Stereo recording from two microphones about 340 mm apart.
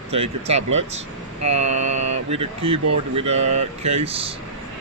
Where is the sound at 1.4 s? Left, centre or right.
Centre.